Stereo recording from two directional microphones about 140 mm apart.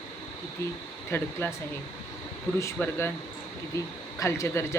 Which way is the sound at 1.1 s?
15° left (ahead or behind).